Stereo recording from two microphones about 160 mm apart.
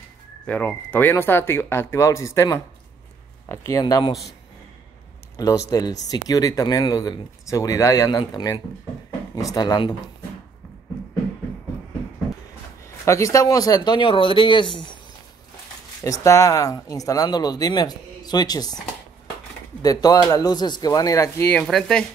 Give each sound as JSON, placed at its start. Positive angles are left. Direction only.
{"t": 0.5, "sound": "speech", "side_deg": 10}
{"t": 3.8, "sound": "speech", "side_deg": 30}
{"t": 5.7, "sound": "speech", "side_deg": 25}
{"t": 13.0, "sound": "speech", "side_deg": 20}
{"t": 16.0, "sound": "speech", "side_deg": 20}
{"t": 19.8, "sound": "speech", "side_deg": 25}
{"t": 21.6, "sound": "speech", "side_deg": 0}